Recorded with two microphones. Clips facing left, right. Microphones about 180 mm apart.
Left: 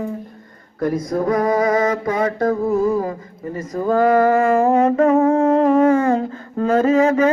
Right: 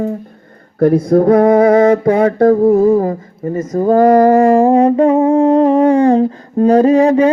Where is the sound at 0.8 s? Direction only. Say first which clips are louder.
Right 10 dB; 60° right (ahead or behind).